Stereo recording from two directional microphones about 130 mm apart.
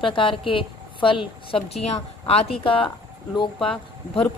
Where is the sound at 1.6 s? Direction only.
50° left (ahead or behind).